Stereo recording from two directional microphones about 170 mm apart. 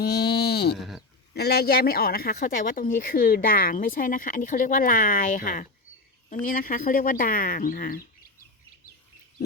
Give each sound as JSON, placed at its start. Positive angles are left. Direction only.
{"t": 0.0, "sound": "sheep", "side_deg": 70}
{"t": 0.8, "sound": "a sound", "side_deg": 0}
{"t": 1.3, "sound": "speech", "side_deg": 70}